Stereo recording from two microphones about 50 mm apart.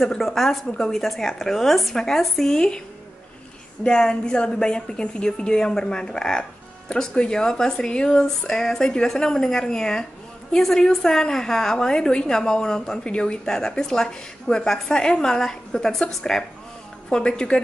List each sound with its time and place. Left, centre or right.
0.1 s a woman's voice: centre
3.8 s a woman's voice: centre